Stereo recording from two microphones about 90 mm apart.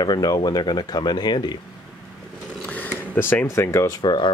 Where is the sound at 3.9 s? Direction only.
60° left (ahead or behind).